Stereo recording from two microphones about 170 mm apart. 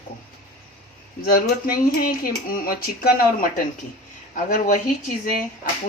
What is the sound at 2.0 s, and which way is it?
Speech, 60° left (ahead or behind).